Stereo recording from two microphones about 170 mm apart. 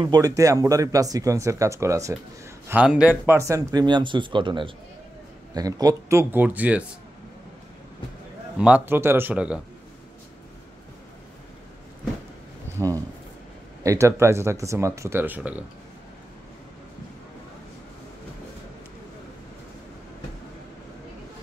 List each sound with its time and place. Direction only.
0.0 s speech: 20° right (ahead or behind)
2.7 s speech: 5° right (ahead or behind)
8.5 s speech: 5° right (ahead or behind)
12.7 s a man's voice: 20° right (ahead or behind)